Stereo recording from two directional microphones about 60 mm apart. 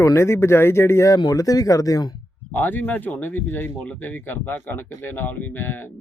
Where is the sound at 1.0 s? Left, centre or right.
Left.